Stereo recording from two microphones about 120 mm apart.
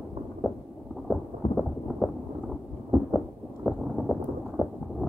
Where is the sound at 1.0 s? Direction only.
Centre (ahead or behind).